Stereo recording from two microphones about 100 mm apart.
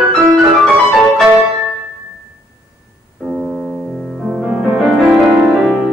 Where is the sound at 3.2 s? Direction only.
5° right (ahead or behind).